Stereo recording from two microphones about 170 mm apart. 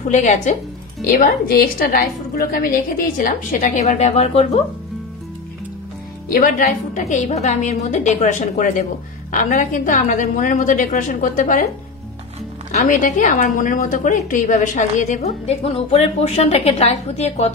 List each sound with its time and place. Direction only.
0.1 s a woman's voice: 45° left (ahead or behind)
6.2 s a woman's voice: 60° left (ahead or behind)
12.7 s a woman's voice: 45° left (ahead or behind)